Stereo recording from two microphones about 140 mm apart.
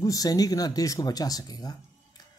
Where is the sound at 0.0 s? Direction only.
25° left (ahead or behind).